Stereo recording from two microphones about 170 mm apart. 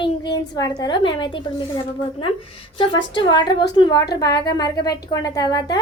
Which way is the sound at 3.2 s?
25° left (ahead or behind).